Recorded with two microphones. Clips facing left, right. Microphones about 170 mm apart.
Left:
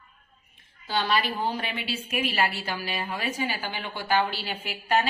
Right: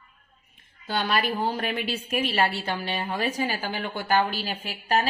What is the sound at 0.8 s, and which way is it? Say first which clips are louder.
A woman's voice: even; 50° right (ahead or behind).